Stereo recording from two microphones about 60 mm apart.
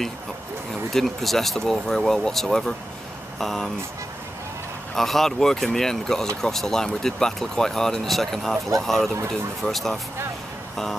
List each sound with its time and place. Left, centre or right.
0.9 s speech: centre
4.9 s speech: centre